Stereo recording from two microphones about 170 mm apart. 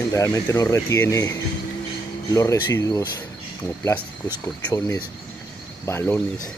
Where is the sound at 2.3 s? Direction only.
20° left (ahead or behind).